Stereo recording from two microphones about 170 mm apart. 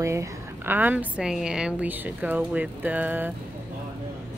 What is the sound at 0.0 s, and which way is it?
A woman's voice, 15° right (ahead or behind).